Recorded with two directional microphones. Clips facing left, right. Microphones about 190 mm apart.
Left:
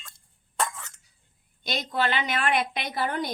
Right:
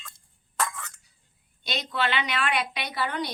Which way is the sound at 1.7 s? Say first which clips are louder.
Left 2 dB; 45° left (ahead or behind).